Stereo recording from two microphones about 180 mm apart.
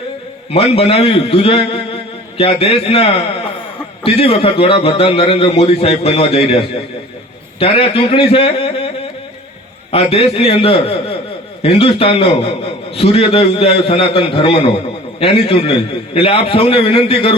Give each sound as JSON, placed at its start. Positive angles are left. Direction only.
{"t": 0.5, "sound": "a man's voice", "side_deg": 35}
{"t": 9.9, "sound": "a man's voice", "side_deg": 35}